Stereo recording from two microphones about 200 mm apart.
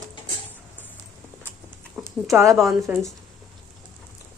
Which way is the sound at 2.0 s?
15° right (ahead or behind).